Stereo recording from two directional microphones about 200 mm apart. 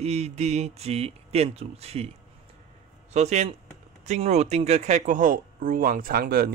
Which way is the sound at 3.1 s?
35° right (ahead or behind).